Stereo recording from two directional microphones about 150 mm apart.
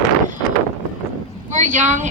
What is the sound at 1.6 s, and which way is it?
Speech, 60° right (ahead or behind).